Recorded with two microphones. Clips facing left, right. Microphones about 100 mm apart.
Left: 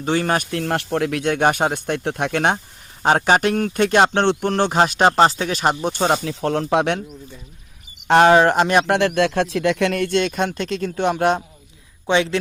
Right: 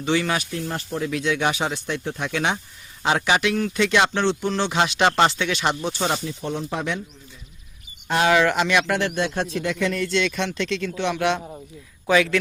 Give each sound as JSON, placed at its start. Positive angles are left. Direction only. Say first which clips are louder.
{"t": 0.0, "sound": "speech", "louder": "left 3 dB", "side_deg": 45}
{"t": 0.5, "sound": "speech", "louder": "left 6 dB", "side_deg": 70}
{"t": 6.2, "sound": "speech", "louder": "left 6 dB", "side_deg": 90}
{"t": 8.0, "sound": "speech", "louder": "left 8 dB", "side_deg": 60}
{"t": 8.3, "sound": "speech", "louder": "left 5 dB", "side_deg": 40}
{"t": 9.0, "sound": "speech", "louder": "left 6 dB", "side_deg": 75}
{"t": 12.0, "sound": "speech", "louder": "even", "side_deg": 30}